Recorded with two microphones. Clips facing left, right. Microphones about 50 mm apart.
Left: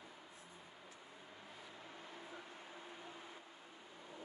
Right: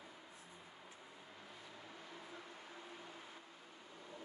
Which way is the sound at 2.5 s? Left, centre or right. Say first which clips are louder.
Even; centre.